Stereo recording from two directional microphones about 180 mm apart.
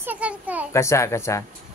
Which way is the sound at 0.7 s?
15° left (ahead or behind).